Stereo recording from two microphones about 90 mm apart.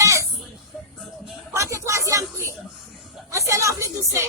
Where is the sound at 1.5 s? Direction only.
30° right (ahead or behind).